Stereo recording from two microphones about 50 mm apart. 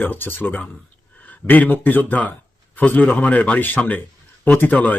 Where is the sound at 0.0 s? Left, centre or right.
Left.